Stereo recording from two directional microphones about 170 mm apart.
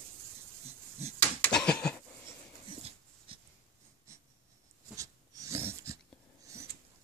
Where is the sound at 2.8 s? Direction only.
30° right (ahead or behind).